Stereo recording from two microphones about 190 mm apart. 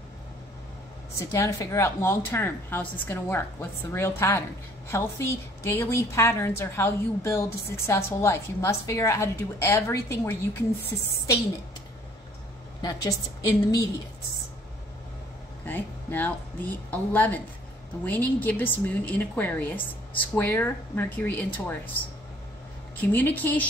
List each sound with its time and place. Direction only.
1.3 s a woman's voice: 15° left (ahead or behind)
12.8 s a woman's voice: 20° left (ahead or behind)
15.6 s a woman's voice: 10° left (ahead or behind)
22.9 s a woman's voice: 10° left (ahead or behind)